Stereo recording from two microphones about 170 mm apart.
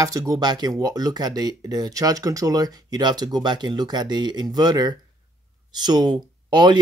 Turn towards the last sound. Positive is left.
turn(degrees=-25)  # may be behind; listen again after turning